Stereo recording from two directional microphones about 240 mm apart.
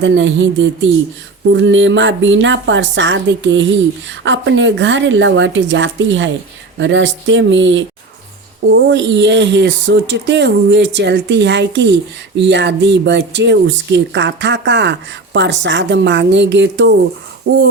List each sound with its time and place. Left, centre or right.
0.0 s speech: right